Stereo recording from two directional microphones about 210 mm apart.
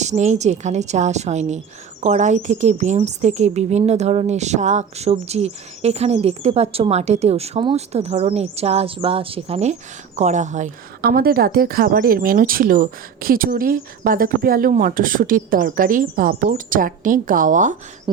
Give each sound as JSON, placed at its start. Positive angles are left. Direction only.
{"t": 0.0, "sound": "a woman's voice", "side_deg": -35}